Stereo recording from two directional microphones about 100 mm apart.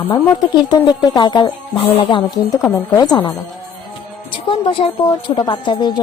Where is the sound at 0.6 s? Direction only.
45° left (ahead or behind).